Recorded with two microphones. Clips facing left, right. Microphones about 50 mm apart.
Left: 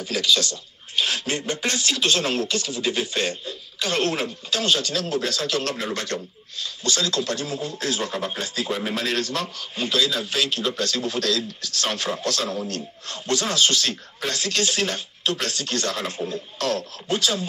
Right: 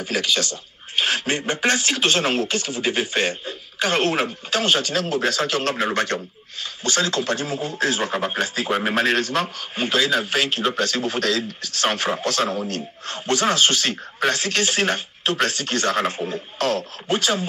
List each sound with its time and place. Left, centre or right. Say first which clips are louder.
0.0 s speech: even; right